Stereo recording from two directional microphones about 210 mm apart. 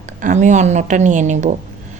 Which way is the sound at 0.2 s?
35° right (ahead or behind).